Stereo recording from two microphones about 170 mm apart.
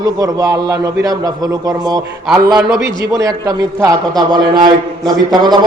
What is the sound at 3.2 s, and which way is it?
A man's voice, 20° right (ahead or behind).